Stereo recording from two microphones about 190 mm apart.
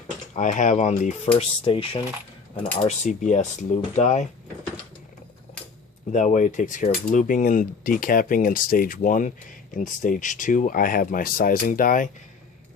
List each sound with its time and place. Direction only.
0.3 s speech: 40° left (ahead or behind)
6.1 s speech: 40° left (ahead or behind)